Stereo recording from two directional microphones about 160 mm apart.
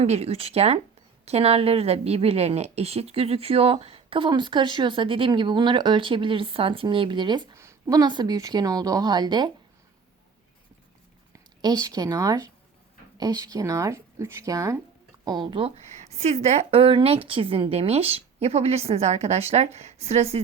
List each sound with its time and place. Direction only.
0.0 s a woman's voice: 40° right (ahead or behind)
7.5 s a woman's voice: 15° right (ahead or behind)
11.6 s a woman's voice: 25° right (ahead or behind); by 20.4 s 40° right (ahead or behind)